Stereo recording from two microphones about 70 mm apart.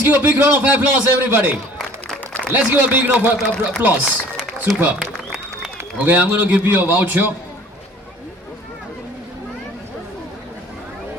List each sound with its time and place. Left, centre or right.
0.0 s a man's voice: right
2.5 s a man's voice: right
4.7 s a man's voice: right